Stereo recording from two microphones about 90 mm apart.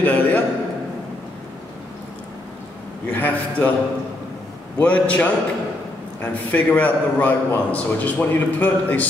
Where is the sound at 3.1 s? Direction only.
20° left (ahead or behind).